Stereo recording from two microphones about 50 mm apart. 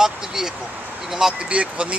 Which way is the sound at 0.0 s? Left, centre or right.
Centre.